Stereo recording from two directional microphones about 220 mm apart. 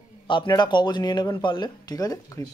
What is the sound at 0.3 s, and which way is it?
Speech, 20° left (ahead or behind).